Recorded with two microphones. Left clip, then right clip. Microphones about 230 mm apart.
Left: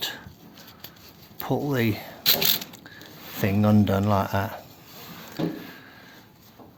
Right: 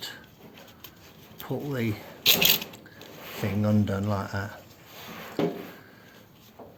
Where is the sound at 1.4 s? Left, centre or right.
Left.